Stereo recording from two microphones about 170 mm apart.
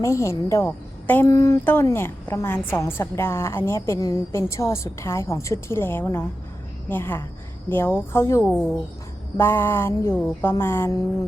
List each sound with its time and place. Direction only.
0.0 s a woman's voice: 15° left (ahead or behind)